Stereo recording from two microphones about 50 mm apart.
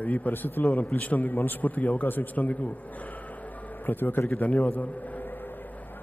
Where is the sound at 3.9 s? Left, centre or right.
Left.